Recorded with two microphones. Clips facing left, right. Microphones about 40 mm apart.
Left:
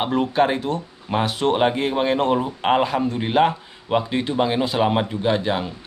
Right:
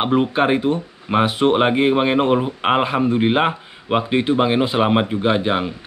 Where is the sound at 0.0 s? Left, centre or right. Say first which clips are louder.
Right 2 dB; right.